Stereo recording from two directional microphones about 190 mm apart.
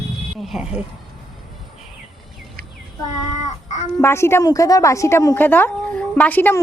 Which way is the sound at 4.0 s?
15° left (ahead or behind).